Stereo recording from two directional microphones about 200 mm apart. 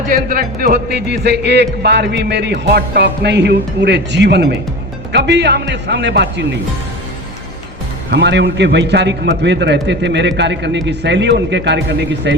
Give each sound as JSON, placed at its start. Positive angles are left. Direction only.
{"t": 0.1, "sound": "speech", "side_deg": -45}
{"t": 8.1, "sound": "speech", "side_deg": -60}